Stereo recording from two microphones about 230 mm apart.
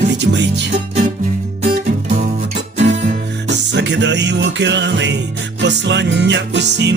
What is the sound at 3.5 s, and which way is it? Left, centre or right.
Music, right.